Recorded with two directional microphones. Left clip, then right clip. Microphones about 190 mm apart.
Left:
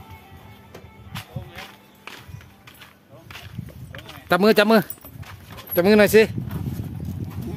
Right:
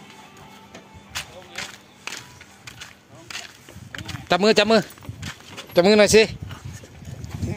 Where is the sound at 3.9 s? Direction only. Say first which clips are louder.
Right 5 dB; 60° right (ahead or behind).